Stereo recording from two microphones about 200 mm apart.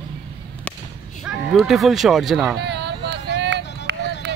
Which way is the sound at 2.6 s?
55° right (ahead or behind).